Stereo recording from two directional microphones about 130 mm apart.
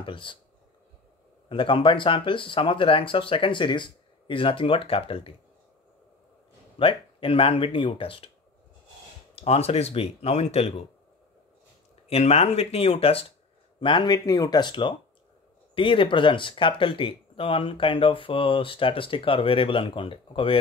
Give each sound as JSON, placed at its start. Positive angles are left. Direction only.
{"t": 0.0, "sound": "speech", "side_deg": 40}
{"t": 1.5, "sound": "speech", "side_deg": 40}
{"t": 6.8, "sound": "speech", "side_deg": 45}
{"t": 9.3, "sound": "speech", "side_deg": 50}
{"t": 12.1, "sound": "speech", "side_deg": 55}